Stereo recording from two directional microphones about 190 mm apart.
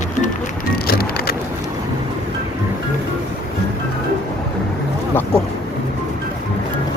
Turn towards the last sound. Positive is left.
turn(degrees=10)  # may be behind; listen again after turning